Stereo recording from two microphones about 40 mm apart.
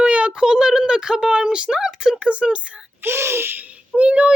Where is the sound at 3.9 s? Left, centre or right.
Right.